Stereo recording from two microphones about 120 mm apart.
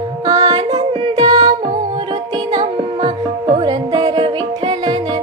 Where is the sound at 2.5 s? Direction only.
40° right (ahead or behind).